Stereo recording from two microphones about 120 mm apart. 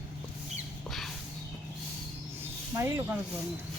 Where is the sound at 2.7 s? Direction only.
20° right (ahead or behind).